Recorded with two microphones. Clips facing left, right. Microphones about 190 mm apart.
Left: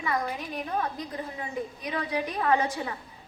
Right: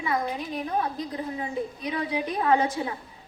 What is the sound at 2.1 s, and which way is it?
Speech, 15° right (ahead or behind).